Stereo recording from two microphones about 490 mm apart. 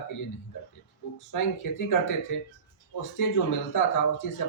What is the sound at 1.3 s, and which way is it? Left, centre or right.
Speech, left.